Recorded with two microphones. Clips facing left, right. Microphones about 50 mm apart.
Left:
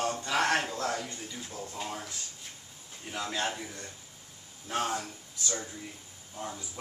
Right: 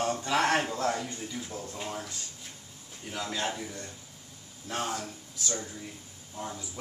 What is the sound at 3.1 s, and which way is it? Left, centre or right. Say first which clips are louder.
Speech: even; centre.